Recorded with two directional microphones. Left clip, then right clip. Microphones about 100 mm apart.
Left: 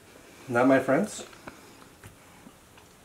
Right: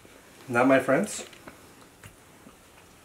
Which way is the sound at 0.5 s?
5° right (ahead or behind).